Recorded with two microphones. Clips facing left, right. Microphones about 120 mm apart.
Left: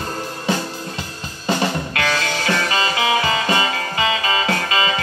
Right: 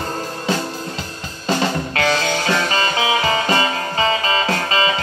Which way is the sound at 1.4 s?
30° right (ahead or behind).